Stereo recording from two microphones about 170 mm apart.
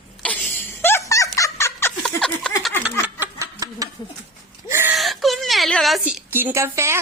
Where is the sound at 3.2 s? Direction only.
20° right (ahead or behind).